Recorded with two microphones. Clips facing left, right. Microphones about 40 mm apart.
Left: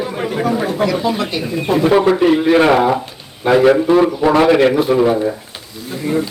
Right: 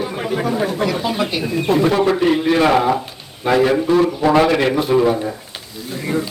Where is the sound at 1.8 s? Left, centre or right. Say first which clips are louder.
Left 7 dB; centre.